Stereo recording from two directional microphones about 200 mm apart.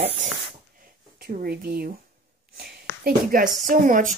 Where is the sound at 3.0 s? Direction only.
45° right (ahead or behind).